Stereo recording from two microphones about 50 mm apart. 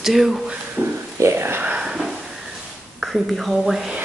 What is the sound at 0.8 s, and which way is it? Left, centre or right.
Speech, right.